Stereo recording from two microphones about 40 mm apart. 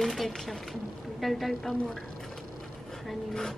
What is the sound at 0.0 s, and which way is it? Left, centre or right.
A woman's voice, centre.